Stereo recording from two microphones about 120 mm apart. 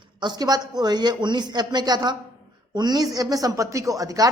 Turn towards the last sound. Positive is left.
turn(degrees=-30)  # may be behind; listen again after turning